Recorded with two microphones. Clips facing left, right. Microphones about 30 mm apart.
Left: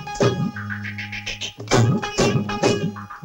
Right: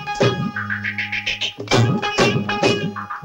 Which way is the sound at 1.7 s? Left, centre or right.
Right.